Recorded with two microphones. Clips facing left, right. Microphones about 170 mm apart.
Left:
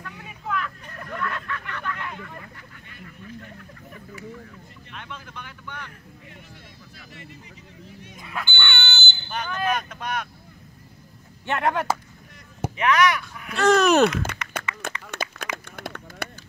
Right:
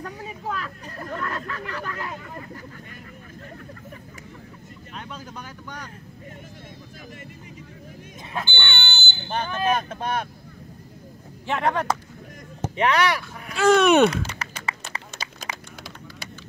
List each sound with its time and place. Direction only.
0.0 s hubbub: 35° right (ahead or behind)
4.9 s speech: 40° right (ahead or behind)
8.3 s fire alarm: 25° right (ahead or behind)
9.3 s speech: 30° right (ahead or behind)
11.4 s speech: centre (ahead or behind)
12.7 s speech: 35° right (ahead or behind)
13.6 s speech: centre (ahead or behind)
14.8 s a sound: 55° left (ahead or behind)